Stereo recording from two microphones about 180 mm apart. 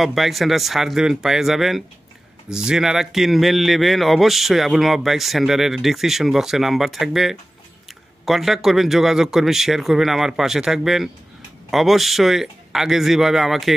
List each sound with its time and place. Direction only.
0.0 s speech: centre (ahead or behind)